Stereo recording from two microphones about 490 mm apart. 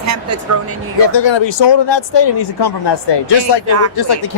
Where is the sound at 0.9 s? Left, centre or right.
Left.